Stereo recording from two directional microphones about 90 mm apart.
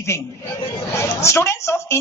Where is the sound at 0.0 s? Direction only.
30° left (ahead or behind).